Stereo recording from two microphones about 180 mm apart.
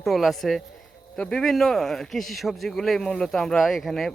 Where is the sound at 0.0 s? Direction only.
Centre (ahead or behind).